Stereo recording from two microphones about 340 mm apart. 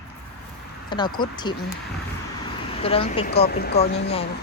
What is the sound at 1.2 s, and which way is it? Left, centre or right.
Speech, centre.